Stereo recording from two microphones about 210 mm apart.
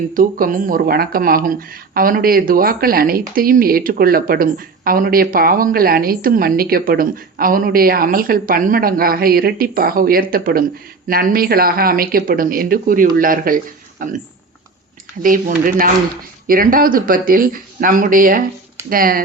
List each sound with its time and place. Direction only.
0.1 s speech: 40° right (ahead or behind)
15.2 s speech: 40° right (ahead or behind)